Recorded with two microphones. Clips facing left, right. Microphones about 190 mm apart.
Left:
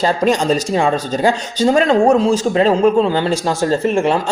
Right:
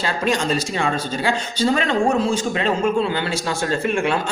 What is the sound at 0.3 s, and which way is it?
Speech, 35° left (ahead or behind).